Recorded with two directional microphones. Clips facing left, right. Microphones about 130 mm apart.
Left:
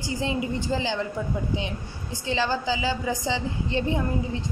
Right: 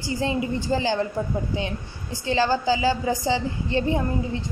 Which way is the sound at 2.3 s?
35° right (ahead or behind).